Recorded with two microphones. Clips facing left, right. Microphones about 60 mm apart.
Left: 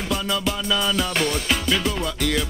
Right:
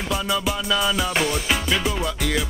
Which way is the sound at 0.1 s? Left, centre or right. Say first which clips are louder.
Right 1 dB; centre.